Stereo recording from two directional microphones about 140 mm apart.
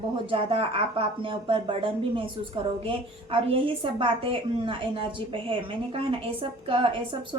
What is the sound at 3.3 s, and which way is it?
A woman's voice, 40° right (ahead or behind).